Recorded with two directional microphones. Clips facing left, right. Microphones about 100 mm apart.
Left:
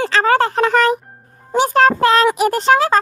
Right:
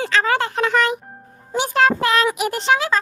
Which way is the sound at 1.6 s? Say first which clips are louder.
Left 5 dB; 40° left (ahead or behind).